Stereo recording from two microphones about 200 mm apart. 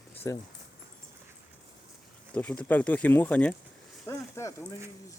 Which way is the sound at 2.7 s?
5° left (ahead or behind).